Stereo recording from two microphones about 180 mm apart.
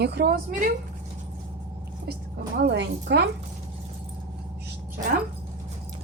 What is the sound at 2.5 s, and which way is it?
Speech, 65° right (ahead or behind).